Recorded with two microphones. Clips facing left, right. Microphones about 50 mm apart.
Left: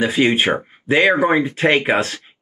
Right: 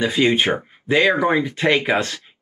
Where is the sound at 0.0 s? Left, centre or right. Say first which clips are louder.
Left 1 dB; left.